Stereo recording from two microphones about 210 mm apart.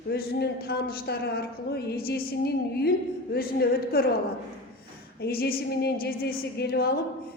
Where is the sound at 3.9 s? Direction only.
45° left (ahead or behind).